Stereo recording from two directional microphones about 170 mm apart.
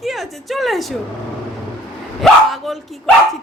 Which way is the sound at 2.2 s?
Centre (ahead or behind).